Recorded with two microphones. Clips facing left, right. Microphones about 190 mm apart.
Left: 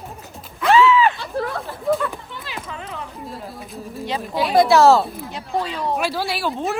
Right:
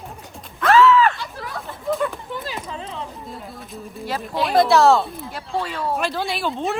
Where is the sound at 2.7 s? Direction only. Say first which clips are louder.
Right 1 dB; 30° right (ahead or behind).